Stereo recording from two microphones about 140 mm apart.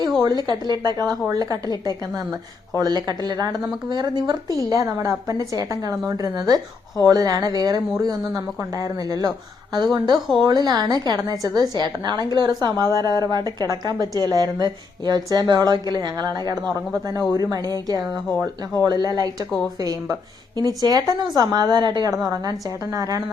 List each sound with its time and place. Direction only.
0.2 s a woman's voice: 30° right (ahead or behind)
2.7 s a woman's voice: 30° right (ahead or behind)